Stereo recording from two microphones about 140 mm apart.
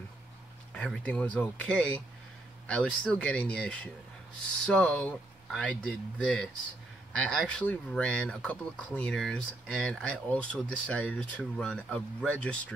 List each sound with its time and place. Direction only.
0.7 s speech: 5° left (ahead or behind)